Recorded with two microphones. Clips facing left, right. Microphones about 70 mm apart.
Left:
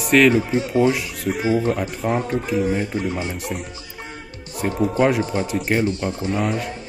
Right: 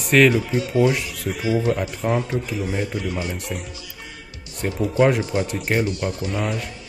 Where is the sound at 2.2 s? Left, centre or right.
Left.